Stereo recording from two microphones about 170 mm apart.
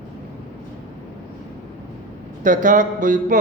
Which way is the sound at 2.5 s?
50° right (ahead or behind).